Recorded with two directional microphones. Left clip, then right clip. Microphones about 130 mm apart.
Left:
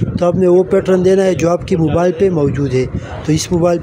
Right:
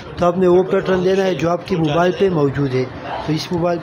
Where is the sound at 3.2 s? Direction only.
55° left (ahead or behind).